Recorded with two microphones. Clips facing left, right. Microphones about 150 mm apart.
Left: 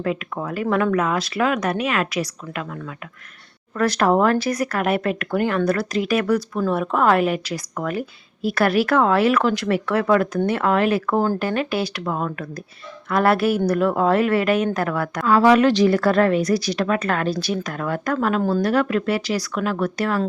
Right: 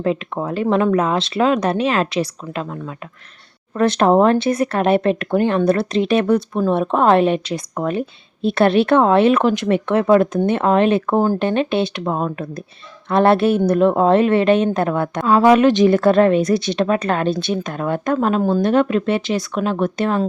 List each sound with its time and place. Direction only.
0.0 s speech: 30° right (ahead or behind)